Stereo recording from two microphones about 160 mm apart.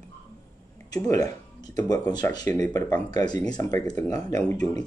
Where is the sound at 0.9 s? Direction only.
25° left (ahead or behind).